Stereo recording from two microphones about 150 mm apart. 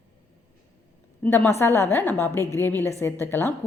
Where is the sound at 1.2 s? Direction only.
15° left (ahead or behind).